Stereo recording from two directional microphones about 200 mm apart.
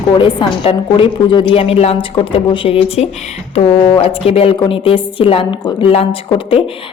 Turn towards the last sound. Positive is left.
turn(degrees=30)  # may be behind; listen again after turning